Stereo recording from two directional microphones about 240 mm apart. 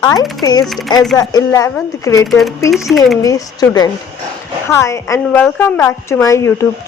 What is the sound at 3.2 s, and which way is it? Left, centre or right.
A woman's voice, centre.